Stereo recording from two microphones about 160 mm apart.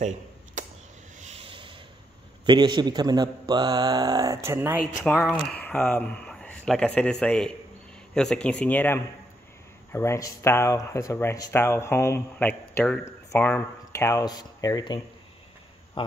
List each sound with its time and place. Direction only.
0.6 s a sound: 55° right (ahead or behind)
1.3 s sanding: 35° right (ahead or behind)
2.4 s a man's voice: 30° right (ahead or behind)
5.2 s speech: 5° left (ahead or behind); by 15.0 s 25° left (ahead or behind)